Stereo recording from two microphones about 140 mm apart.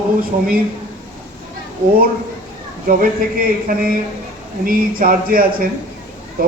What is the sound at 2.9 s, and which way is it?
Speech, 90° right.